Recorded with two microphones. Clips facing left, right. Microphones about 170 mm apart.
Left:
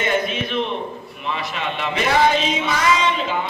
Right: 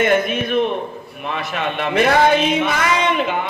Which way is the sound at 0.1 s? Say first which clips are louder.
Right 5 dB; 50° right (ahead or behind).